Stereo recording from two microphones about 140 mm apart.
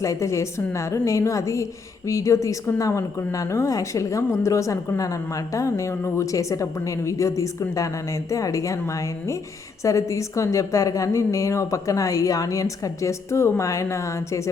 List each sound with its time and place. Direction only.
0.0 s a woman's voice: 20° left (ahead or behind)